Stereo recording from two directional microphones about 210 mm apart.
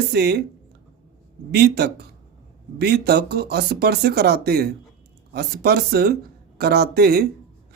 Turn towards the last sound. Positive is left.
turn(degrees=-50)  # may be behind; listen again after turning